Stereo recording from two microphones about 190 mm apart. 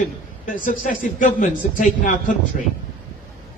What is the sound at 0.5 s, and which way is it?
A man's voice, 45° left (ahead or behind).